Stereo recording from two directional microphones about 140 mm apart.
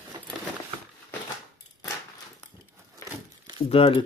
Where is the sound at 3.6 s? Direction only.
40° left (ahead or behind).